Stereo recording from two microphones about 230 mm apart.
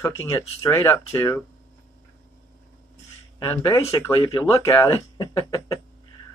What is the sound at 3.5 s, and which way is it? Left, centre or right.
Speech, centre.